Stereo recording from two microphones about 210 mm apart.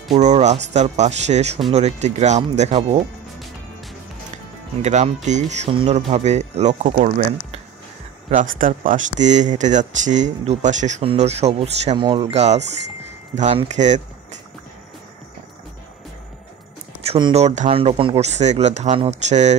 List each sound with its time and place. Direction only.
0.1 s speech: 30° right (ahead or behind)
4.8 s speech: 35° right (ahead or behind)
8.3 s speech: 40° right (ahead or behind)
17.0 s speech: 30° right (ahead or behind)